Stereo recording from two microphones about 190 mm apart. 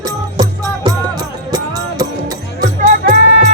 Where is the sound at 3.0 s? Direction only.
40° right (ahead or behind).